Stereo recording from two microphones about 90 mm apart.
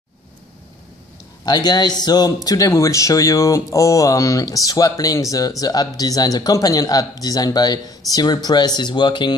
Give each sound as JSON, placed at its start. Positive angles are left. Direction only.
{"t": 1.4, "sound": "speech", "side_deg": 50}